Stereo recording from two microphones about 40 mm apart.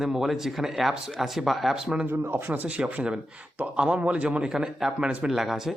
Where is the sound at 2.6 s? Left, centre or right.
Right.